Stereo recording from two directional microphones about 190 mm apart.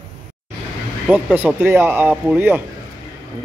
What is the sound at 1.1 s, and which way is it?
Speech, 10° right (ahead or behind).